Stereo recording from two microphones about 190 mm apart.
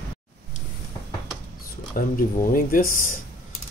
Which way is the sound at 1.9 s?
45° left (ahead or behind).